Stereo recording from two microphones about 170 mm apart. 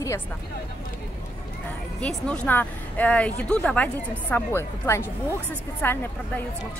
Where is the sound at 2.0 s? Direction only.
5° left (ahead or behind).